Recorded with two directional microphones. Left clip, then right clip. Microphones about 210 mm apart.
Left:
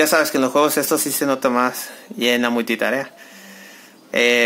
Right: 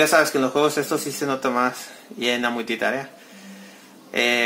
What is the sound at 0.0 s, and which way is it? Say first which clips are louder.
Speech: left 1 dB; 45° left (ahead or behind).